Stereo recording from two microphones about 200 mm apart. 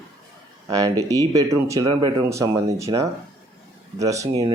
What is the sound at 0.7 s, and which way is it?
Speech, 15° right (ahead or behind).